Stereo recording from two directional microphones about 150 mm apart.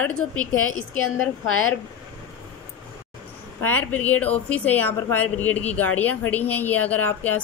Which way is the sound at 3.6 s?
10° left (ahead or behind).